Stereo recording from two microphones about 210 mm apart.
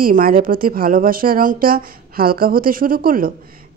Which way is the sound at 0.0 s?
45° right (ahead or behind).